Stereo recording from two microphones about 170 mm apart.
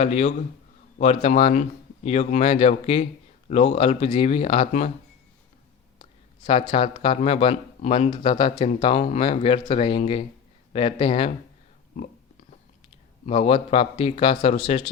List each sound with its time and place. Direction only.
0.0 s a man's voice: 40° left (ahead or behind)
6.0 s a man's voice: 30° left (ahead or behind)
13.2 s a man's voice: 35° left (ahead or behind)